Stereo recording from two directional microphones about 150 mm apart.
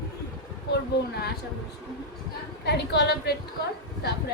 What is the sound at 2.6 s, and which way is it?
Speech, 90° left.